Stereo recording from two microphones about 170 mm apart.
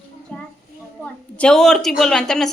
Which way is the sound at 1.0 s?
5° left (ahead or behind).